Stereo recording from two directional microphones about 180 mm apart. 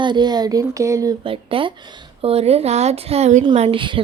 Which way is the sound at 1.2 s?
30° right (ahead or behind).